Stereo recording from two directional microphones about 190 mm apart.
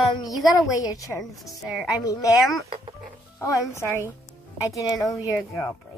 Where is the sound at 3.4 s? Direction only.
15° left (ahead or behind).